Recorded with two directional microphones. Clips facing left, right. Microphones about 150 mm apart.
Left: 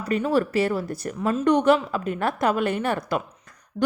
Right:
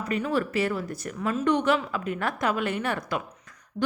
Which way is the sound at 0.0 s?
35° left (ahead or behind).